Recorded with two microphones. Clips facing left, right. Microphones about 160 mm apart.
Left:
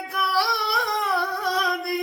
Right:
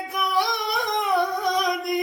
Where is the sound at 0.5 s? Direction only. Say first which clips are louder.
Even; 20° right (ahead or behind).